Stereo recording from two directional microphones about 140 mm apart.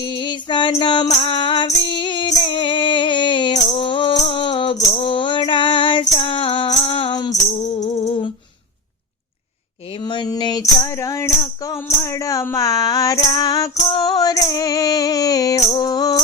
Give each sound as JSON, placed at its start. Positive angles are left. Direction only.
{"t": 0.0, "sound": "female singing", "side_deg": 35}
{"t": 0.8, "sound": "music", "side_deg": 35}
{"t": 1.0, "sound": "music", "side_deg": 50}
{"t": 1.3, "sound": "music", "side_deg": 35}
{"t": 4.1, "sound": "music", "side_deg": 50}
{"t": 4.4, "sound": "music", "side_deg": 35}
{"t": 7.4, "sound": "music", "side_deg": 55}
{"t": 10.0, "sound": "music", "side_deg": 30}
{"t": 15.7, "sound": "mantra", "side_deg": 25}